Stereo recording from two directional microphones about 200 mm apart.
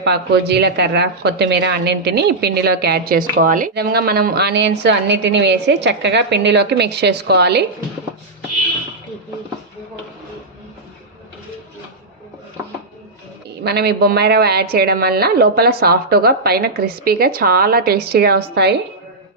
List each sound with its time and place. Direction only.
0.0 s a woman's voice: 55° right (ahead or behind)
13.7 s a woman's voice: 55° right (ahead or behind)